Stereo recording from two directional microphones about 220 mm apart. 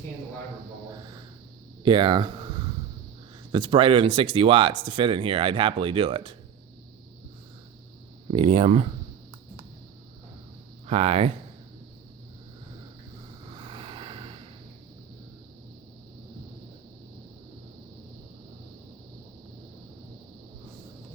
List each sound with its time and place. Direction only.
1.8 s speech: 20° right (ahead or behind)
3.5 s speech: 20° right (ahead or behind)
8.3 s speech: 25° right (ahead or behind)
10.8 s speech: 30° right (ahead or behind)
13.6 s a sound: 25° right (ahead or behind)